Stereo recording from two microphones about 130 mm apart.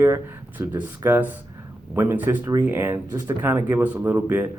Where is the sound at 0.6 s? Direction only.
15° right (ahead or behind).